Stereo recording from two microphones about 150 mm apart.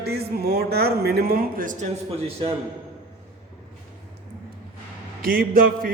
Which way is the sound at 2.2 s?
40° right (ahead or behind).